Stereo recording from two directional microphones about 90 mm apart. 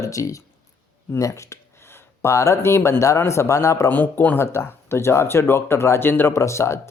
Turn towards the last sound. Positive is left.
turn(degrees=30)  # may be behind; listen again after turning